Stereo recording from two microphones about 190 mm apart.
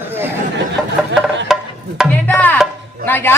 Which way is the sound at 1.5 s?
Centre (ahead or behind).